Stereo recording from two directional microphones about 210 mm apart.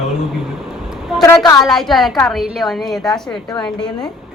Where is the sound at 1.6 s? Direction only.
Centre (ahead or behind).